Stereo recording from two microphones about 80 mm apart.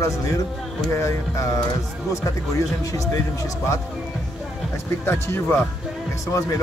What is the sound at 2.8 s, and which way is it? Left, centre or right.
Speech, left.